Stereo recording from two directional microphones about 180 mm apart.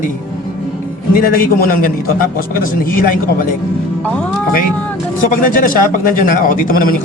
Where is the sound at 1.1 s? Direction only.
55° left (ahead or behind).